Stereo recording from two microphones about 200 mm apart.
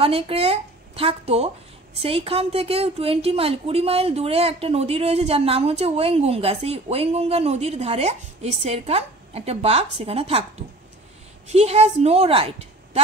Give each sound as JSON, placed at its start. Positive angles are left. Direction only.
{"t": 0.0, "sound": "a woman's voice", "side_deg": -30}
{"t": 11.4, "sound": "a woman's voice", "side_deg": -30}